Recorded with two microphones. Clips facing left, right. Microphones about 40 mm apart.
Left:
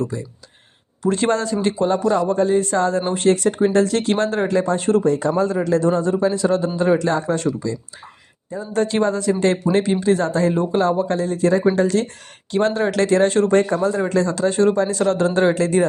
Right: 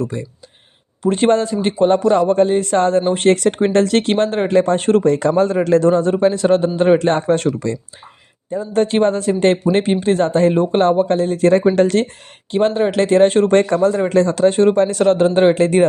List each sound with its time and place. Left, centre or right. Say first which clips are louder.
0.0 s a man's voice: right 2 dB; right
4.1 s speech: right 4 dB; right
4.6 s speech: right 3 dB; right
5.0 s speech: right 3 dB; right
5.4 s a man's voice: right 4 dB; right
8.4 s speech: right 4 dB; right
12.5 s speech: right 3 dB; right
13.1 s speech: right 5 dB; right
13.5 s a man's voice: right 3 dB; right
13.7 s speech: right 5 dB; right